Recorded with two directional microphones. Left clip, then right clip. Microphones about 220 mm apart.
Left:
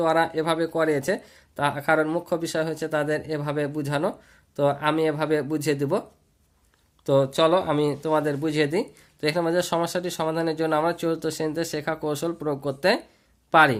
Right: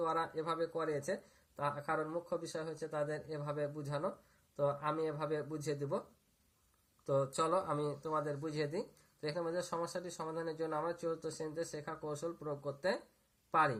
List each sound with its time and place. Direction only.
0.0 s speech: 40° left (ahead or behind)
7.1 s speech: 35° left (ahead or behind)